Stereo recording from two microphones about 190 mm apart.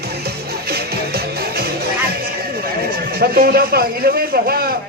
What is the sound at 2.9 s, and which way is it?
A man's voice, 55° right (ahead or behind).